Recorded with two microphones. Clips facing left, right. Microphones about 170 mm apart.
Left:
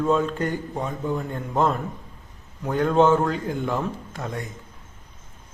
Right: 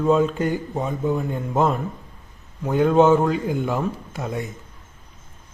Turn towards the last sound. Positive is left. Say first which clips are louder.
# right 3 dB
turn(degrees=-10)  # may be behind; listen again after turning